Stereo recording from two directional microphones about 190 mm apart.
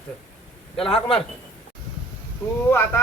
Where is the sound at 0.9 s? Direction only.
30° left (ahead or behind).